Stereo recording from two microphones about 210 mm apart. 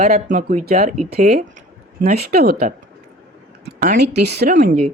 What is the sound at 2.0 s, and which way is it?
Speech, 45° right (ahead or behind).